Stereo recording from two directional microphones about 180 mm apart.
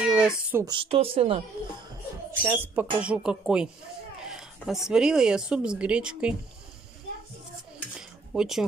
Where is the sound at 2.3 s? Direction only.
15° right (ahead or behind).